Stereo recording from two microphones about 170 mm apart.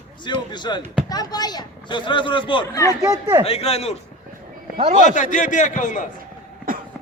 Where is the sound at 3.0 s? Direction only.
15° right (ahead or behind).